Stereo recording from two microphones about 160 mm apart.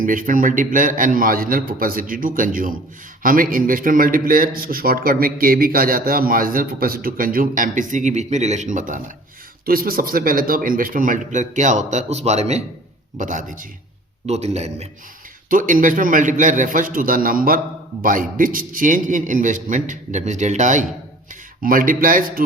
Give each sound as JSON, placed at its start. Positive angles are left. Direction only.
{"t": 0.0, "sound": "speech", "side_deg": -55}
{"t": 9.6, "sound": "a man's voice", "side_deg": -65}
{"t": 14.3, "sound": "a man's voice", "side_deg": -40}
{"t": 15.4, "sound": "a man's voice", "side_deg": -55}